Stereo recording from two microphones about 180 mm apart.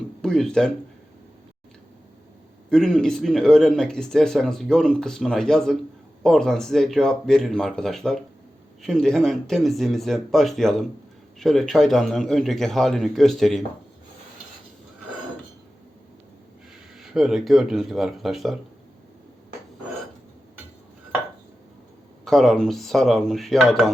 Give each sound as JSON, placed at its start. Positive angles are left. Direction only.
{"t": 0.2, "sound": "speech", "side_deg": 5}
{"t": 2.6, "sound": "speech", "side_deg": 5}
{"t": 17.0, "sound": "speech", "side_deg": 0}
{"t": 22.2, "sound": "speech", "side_deg": 0}